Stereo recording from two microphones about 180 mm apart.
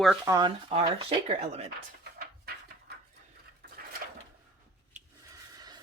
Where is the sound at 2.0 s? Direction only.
60° right (ahead or behind).